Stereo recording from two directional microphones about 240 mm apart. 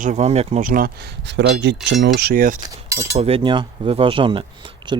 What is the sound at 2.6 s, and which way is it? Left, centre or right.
Speech, centre.